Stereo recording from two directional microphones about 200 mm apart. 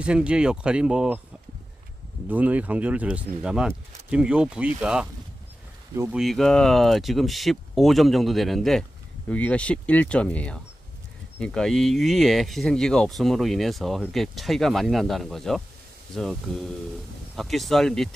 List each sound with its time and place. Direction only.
0.0 s speech: 5° right (ahead or behind)
2.2 s speech: 10° right (ahead or behind)
6.1 s speech: centre (ahead or behind)